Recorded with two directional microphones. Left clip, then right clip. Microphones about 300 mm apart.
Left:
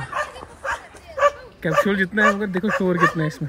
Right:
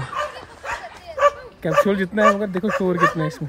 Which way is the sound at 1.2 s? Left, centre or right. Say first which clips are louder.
Right 1 dB; centre.